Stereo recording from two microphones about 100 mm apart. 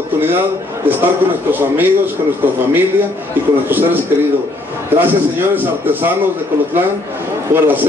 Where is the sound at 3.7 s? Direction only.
20° right (ahead or behind).